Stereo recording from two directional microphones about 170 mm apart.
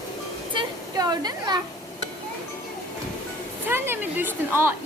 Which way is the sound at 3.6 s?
15° right (ahead or behind).